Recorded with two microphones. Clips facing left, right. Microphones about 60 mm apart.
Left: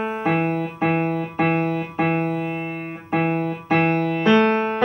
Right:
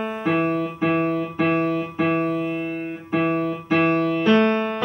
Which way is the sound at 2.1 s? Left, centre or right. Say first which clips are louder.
Right 1 dB; centre.